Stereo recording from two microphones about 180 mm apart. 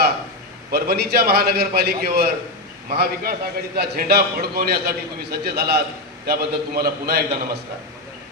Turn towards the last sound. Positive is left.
turn(degrees=-60)  # may be behind; listen again after turning